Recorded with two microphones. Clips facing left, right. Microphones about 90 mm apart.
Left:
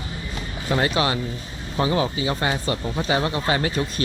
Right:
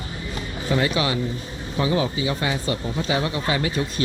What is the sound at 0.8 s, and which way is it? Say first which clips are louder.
Speech: left 2 dB; 45° left (ahead or behind).